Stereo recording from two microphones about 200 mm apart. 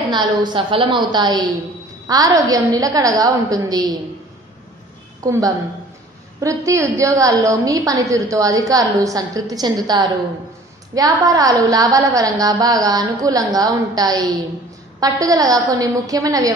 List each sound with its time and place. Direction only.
0.1 s a woman's voice: 20° right (ahead or behind)
5.2 s a woman's voice: 15° right (ahead or behind)